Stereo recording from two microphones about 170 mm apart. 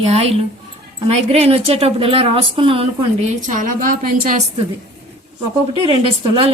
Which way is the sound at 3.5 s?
50° right (ahead or behind).